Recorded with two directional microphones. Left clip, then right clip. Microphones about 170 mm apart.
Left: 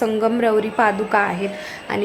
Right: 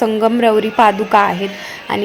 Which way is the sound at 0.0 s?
20° right (ahead or behind).